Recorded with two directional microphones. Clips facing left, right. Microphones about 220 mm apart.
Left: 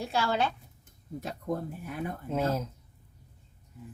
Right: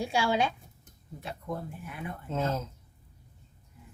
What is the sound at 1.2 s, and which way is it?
Speech, 40° left (ahead or behind).